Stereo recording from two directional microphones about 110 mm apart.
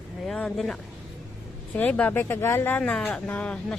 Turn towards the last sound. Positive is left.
turn(degrees=10)  # may be behind; listen again after turning